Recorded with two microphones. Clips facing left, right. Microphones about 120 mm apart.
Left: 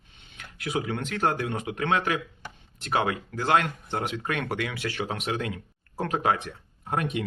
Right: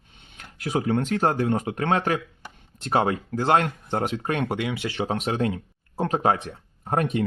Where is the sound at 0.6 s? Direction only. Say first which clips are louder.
Right 6 dB; 40° right (ahead or behind).